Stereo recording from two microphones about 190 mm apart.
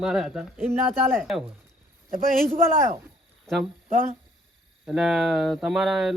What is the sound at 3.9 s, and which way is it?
Speech, 45° right (ahead or behind).